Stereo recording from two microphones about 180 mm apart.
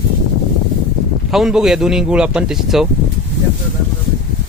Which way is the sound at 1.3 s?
Centre (ahead or behind).